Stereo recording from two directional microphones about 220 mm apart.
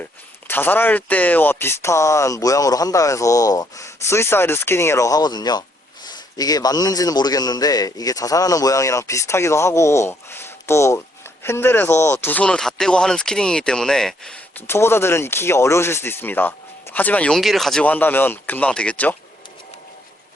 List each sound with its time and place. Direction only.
0.0 s speech: 10° left (ahead or behind)